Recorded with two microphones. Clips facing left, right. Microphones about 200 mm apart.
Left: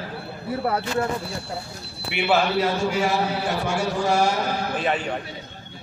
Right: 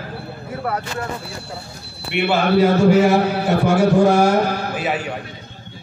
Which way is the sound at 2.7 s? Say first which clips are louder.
Right 9 dB; 60° right (ahead or behind).